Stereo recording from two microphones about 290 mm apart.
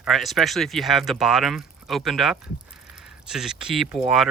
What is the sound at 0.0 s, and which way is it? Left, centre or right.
Speech, centre.